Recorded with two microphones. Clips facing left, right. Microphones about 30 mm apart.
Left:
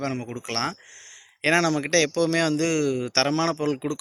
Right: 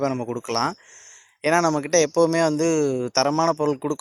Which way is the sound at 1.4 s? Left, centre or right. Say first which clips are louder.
Right 2 dB; left.